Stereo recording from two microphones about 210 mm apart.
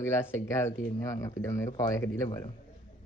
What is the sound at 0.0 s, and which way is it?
Speech, 15° left (ahead or behind).